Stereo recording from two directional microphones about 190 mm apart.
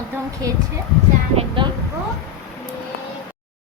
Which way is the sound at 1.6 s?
25° right (ahead or behind).